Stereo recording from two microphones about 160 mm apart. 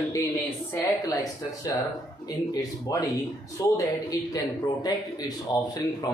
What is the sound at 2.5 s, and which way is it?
A man's voice, 25° left (ahead or behind).